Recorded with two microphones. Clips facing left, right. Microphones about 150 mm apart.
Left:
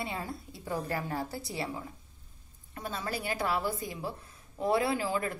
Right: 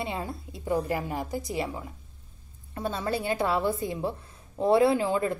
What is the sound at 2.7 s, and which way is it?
Speech, 30° right (ahead or behind).